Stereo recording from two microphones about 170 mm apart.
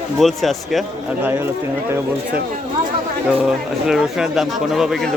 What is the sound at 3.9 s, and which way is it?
A man's voice, 5° right (ahead or behind).